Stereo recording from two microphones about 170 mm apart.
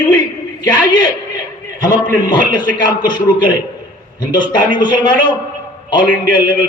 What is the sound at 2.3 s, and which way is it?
A man's voice, 25° left (ahead or behind).